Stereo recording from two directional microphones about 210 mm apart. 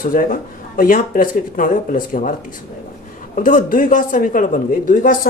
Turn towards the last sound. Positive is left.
turn(degrees=40)  # may be behind; listen again after turning